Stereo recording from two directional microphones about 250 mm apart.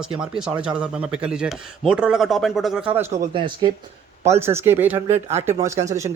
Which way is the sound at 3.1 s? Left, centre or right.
Right.